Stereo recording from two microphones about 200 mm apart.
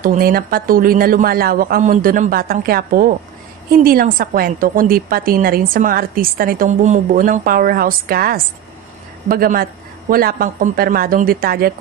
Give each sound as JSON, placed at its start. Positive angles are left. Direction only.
{"t": 0.0, "sound": "a woman's voice", "side_deg": -45}